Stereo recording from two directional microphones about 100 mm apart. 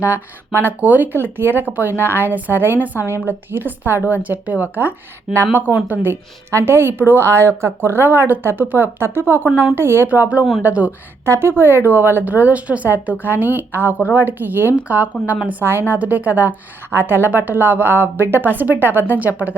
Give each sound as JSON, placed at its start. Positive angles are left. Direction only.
{"t": 0.1, "sound": "a woman's voice", "side_deg": -20}